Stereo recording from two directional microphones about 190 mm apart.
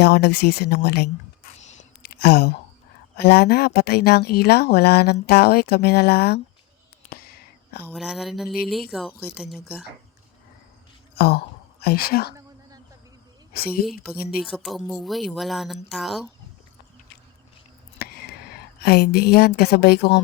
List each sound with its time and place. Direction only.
0.0 s speech: 60° left (ahead or behind)
2.0 s a sound: 60° left (ahead or behind)
3.2 s speech: 60° left (ahead or behind)
7.9 s speech: centre (ahead or behind)
11.1 s a woman's voice: 55° left (ahead or behind)
14.1 s speech: 5° right (ahead or behind)
18.0 s whispering: 55° left (ahead or behind)
18.8 s speech: 60° left (ahead or behind)